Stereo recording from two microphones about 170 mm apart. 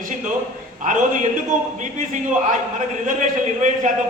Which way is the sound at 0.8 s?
50° right (ahead or behind).